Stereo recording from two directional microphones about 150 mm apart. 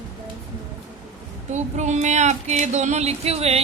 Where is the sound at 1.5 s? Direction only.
50° right (ahead or behind).